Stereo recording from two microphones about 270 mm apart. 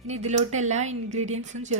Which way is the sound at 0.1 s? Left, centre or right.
Right.